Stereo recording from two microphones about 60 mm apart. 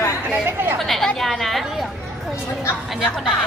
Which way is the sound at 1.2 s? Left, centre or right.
Centre.